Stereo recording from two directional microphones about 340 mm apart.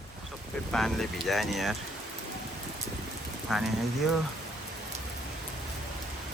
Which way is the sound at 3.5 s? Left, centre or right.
Centre.